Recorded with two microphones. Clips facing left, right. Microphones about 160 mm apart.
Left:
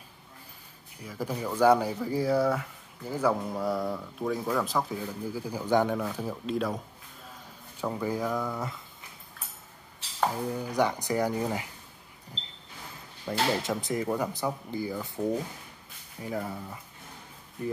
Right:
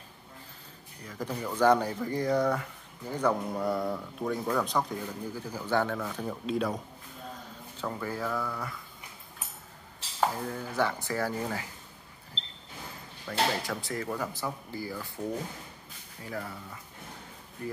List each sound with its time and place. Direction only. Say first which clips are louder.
1.0 s speech: left 2 dB; 10° left (ahead or behind)
7.8 s speech: left 4 dB; 15° left (ahead or behind)
10.3 s speech: left 3 dB; 15° left (ahead or behind)
13.3 s speech: left 2 dB; 20° left (ahead or behind)